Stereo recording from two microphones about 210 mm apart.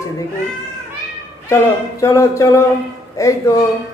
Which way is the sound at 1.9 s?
15° left (ahead or behind).